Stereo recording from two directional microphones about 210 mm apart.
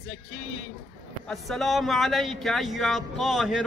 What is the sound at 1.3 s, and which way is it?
A man's voice, centre (ahead or behind).